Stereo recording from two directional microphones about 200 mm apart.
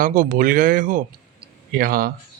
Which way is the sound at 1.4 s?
45° right (ahead or behind).